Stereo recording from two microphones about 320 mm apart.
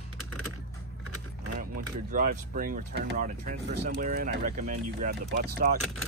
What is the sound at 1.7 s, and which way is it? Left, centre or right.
Speech, right.